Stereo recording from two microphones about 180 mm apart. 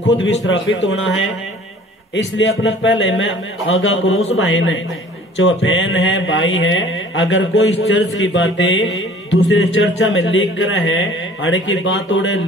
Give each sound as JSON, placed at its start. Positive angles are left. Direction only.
{"t": 0.2, "sound": "a man's voice", "side_deg": 90}